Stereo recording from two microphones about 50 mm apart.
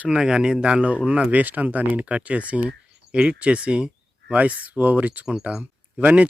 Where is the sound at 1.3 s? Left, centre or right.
Right.